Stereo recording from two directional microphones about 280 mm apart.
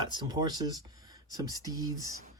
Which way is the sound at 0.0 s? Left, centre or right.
Centre.